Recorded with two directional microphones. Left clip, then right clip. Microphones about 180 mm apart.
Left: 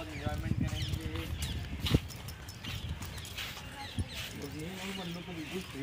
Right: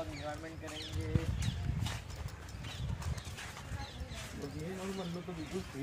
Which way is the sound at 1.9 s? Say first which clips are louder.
Left 11 dB; 45° right (ahead or behind).